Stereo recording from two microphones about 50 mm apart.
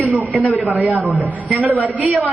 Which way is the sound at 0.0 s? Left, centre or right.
Right.